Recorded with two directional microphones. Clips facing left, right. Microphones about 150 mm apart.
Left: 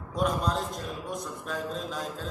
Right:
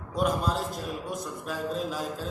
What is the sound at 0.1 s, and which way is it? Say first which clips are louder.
A man's voice: right 1 dB; 5° right (ahead or behind).